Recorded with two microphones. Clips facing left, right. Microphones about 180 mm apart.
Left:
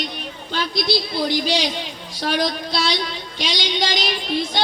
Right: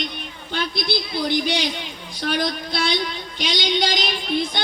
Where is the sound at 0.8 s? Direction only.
55° right (ahead or behind).